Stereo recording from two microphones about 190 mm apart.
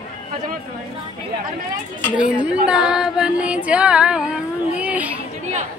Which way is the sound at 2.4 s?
5° right (ahead or behind).